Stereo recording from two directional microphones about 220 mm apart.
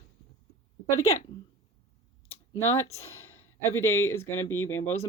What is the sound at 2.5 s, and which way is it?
Speech, 10° left (ahead or behind).